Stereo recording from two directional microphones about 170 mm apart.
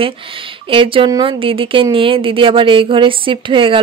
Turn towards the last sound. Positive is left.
turn(degrees=-30)  # may be behind; listen again after turning